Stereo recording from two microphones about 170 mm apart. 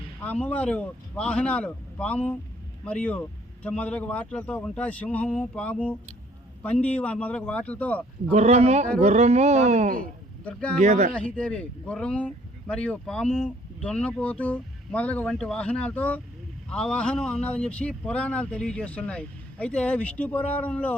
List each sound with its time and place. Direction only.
0.2 s speech: 10° left (ahead or behind)
8.3 s speech: 40° right (ahead or behind)
10.4 s speech: 5° left (ahead or behind)
10.8 s speech: 45° right (ahead or behind)
11.1 s speech: 5° left (ahead or behind)